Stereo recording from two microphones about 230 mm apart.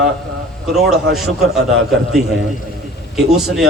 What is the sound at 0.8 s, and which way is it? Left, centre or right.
Speech, centre.